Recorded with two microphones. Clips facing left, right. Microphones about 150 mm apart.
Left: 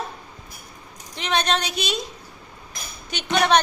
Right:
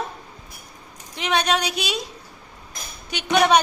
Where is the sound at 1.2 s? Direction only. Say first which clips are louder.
Right 1 dB; 10° right (ahead or behind).